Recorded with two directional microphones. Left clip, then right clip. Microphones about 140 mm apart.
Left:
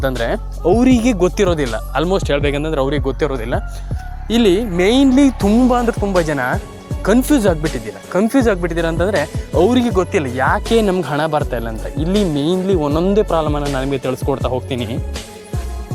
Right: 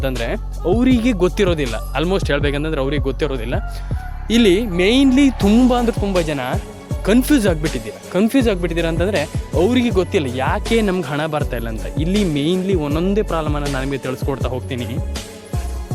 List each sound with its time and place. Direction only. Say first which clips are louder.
0.0 s speech: left 4 dB; centre (ahead or behind)
4.3 s speech: even; 20° right (ahead or behind)
4.5 s speech: left 1 dB; centre (ahead or behind)
5.5 s speech: left 2 dB; 20° right (ahead or behind)
6.1 s speech: left 3 dB; centre (ahead or behind)
7.6 s speech: left 1 dB; centre (ahead or behind)
14.0 s speech: left 4 dB; 10° left (ahead or behind)
14.7 s speech: left 4 dB; 20° left (ahead or behind)